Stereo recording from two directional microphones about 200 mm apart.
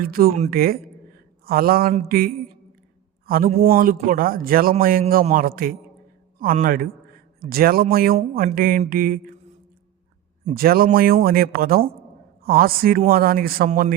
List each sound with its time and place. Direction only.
0.0 s a man's voice: 45° right (ahead or behind)
10.4 s a woman's voice: 50° right (ahead or behind)